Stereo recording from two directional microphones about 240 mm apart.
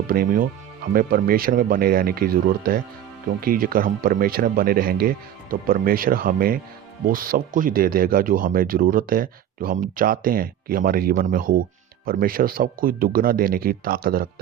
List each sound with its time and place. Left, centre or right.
0.1 s speech: right